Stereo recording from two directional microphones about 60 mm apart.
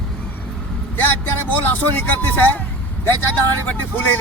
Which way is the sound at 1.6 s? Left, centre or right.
Left.